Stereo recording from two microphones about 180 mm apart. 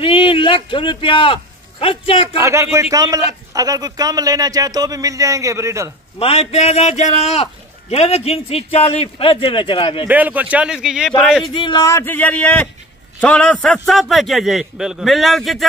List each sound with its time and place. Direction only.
0.0 s a man's voice: 30° left (ahead or behind)
2.3 s a man's voice: 15° right (ahead or behind)
6.1 s a man's voice: 35° left (ahead or behind)
10.0 s a man's voice: 10° right (ahead or behind)
11.4 s a man's voice: 25° left (ahead or behind); by 15.6 s centre (ahead or behind)